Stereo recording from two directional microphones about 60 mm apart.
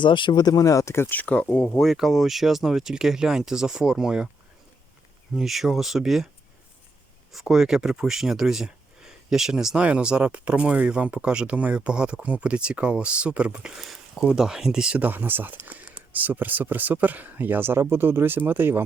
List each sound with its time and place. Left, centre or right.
0.5 s speech: left
1.1 s speech: left
1.8 s speech: centre
5.4 s speech: centre
7.3 s speech: centre
14.9 s speech: right